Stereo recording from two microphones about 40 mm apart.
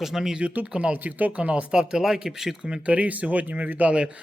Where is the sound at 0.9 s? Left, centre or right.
Right.